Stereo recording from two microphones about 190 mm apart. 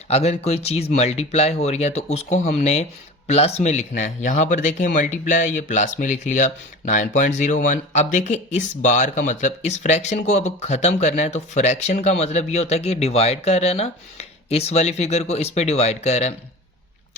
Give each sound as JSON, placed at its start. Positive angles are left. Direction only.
{"t": 0.1, "sound": "speech", "side_deg": 35}